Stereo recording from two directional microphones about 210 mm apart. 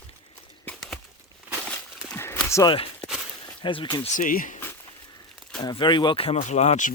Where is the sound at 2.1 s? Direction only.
10° left (ahead or behind).